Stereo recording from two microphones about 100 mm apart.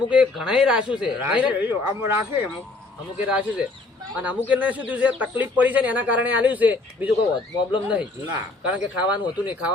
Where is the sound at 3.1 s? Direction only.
10° right (ahead or behind).